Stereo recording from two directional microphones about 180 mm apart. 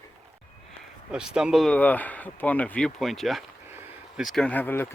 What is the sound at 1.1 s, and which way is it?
Speech, 5° right (ahead or behind).